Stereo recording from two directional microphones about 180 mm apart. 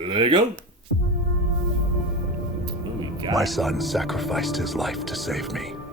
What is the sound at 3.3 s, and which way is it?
Speech, centre (ahead or behind).